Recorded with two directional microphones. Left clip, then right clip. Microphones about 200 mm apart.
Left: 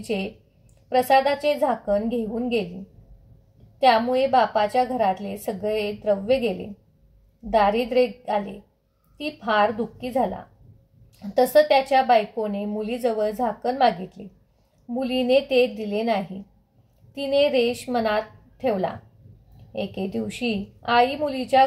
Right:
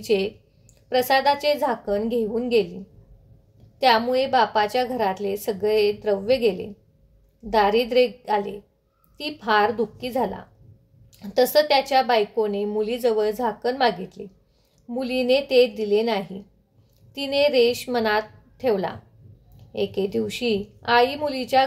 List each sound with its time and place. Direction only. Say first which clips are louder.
0.0 s a woman's voice: right 6 dB; 40° right (ahead or behind)
3.8 s a woman's voice: even; 40° right (ahead or behind)
11.3 s a woman's voice: left 1 dB; 40° right (ahead or behind)